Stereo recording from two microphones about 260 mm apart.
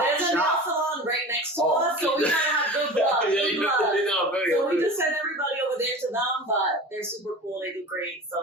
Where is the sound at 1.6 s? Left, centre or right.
Centre.